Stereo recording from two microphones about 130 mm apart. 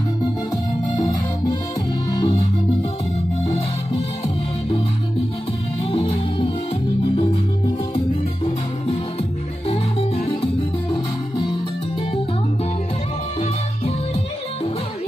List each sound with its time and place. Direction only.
2.0 s music: 35° left (ahead or behind)
3.4 s music: 45° left (ahead or behind)
5.9 s music: 45° left (ahead or behind)
9.7 s music: 50° left (ahead or behind)
10.9 s music: 35° left (ahead or behind)